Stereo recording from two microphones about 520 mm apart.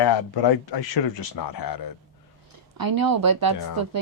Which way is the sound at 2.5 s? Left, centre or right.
Right.